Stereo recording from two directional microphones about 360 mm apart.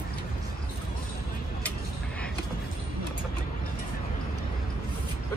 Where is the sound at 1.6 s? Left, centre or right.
Centre.